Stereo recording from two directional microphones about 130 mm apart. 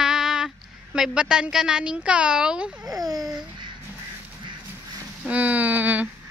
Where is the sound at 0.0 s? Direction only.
5° right (ahead or behind).